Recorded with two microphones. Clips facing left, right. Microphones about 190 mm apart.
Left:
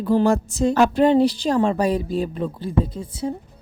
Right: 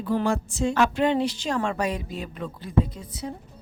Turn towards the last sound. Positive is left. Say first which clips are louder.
# left 8 dB
turn(degrees=30)  # may be behind; listen again after turning